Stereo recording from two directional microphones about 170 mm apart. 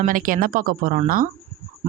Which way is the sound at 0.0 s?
55° right (ahead or behind).